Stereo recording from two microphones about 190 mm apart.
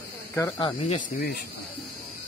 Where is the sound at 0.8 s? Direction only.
40° left (ahead or behind).